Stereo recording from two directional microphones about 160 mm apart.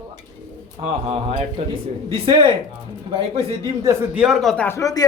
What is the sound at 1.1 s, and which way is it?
Speech, 35° right (ahead or behind).